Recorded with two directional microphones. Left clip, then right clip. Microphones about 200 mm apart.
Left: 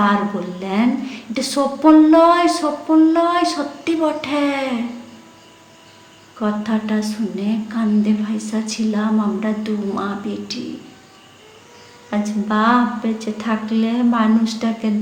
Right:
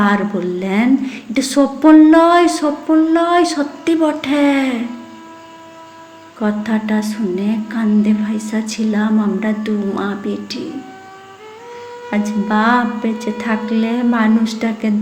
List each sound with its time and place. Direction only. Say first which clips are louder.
0.0 s a woman's voice: right 2 dB; 20° right (ahead or behind)
6.4 s a woman's voice: right 2 dB; 20° right (ahead or behind)
12.1 s a woman's voice: right 3 dB; 20° right (ahead or behind)